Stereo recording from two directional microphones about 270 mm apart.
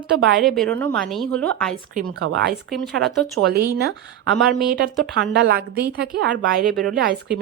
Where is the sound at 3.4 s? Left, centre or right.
Right.